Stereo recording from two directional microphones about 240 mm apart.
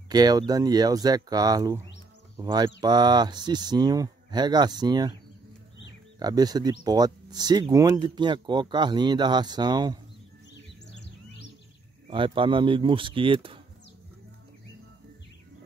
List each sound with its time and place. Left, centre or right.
0.1 s speech: centre
6.1 s speech: centre
12.1 s speech: right